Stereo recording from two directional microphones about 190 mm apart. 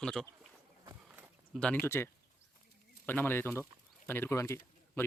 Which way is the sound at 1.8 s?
15° left (ahead or behind).